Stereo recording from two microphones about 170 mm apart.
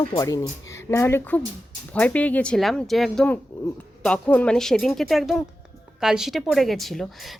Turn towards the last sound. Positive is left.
turn(degrees=0)  # may be behind; listen again after turning